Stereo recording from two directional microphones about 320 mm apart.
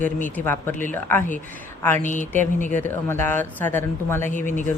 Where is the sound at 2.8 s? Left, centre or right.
Centre.